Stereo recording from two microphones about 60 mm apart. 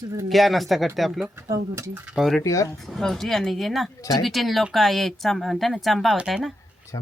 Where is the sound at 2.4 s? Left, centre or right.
Left.